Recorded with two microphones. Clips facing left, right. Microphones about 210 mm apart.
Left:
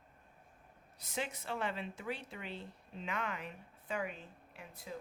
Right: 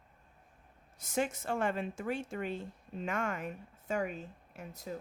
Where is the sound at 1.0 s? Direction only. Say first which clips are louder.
Right 7 dB; 45° right (ahead or behind).